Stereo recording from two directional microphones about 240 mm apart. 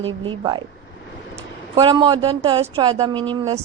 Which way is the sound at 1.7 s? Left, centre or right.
Centre.